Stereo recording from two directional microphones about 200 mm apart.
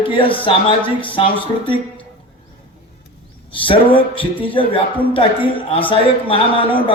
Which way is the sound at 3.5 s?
25° left (ahead or behind).